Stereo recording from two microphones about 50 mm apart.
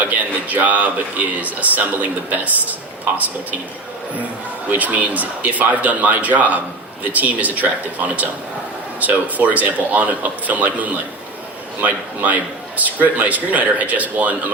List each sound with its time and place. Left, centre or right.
0.0 s a man's voice: right
4.7 s a man's voice: right